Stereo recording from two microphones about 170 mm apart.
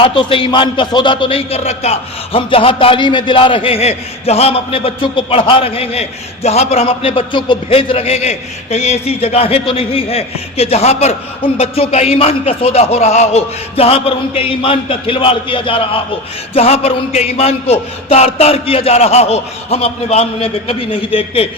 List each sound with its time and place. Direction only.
0.0 s a man's voice: 30° left (ahead or behind)